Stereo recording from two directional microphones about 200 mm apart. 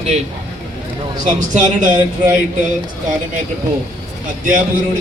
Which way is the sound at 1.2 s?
40° right (ahead or behind).